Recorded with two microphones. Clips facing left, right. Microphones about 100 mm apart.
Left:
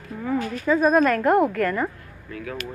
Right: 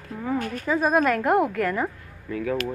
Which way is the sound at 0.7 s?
10° right (ahead or behind).